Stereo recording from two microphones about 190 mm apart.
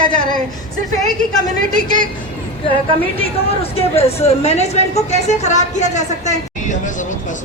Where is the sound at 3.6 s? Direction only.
30° left (ahead or behind).